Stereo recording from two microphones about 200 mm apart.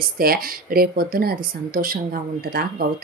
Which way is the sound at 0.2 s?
45° right (ahead or behind).